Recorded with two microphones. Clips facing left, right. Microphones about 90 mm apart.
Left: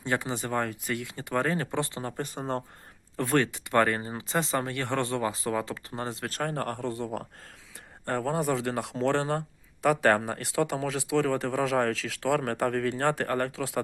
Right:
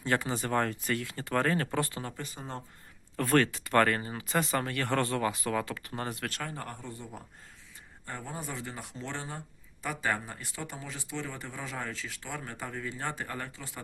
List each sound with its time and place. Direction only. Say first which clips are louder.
0.0 s speech: left 1 dB; 20° left (ahead or behind)
2.1 s speech: left 8 dB; 50° left (ahead or behind)
3.2 s speech: even; 15° left (ahead or behind)
6.4 s speech: left 9 dB; 60° left (ahead or behind); by 13.8 s 80° left